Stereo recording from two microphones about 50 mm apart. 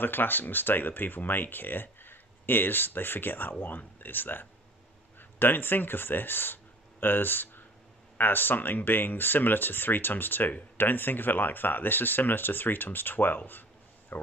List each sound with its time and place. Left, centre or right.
0.0 s speech: left